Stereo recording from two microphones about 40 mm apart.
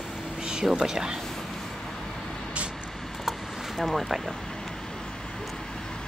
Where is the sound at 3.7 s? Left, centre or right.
Centre.